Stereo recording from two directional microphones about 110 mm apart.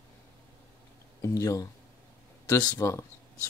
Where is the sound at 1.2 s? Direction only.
30° left (ahead or behind).